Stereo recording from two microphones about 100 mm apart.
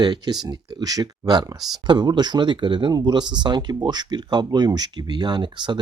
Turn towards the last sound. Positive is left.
turn(degrees=-50)  # may be behind; listen again after turning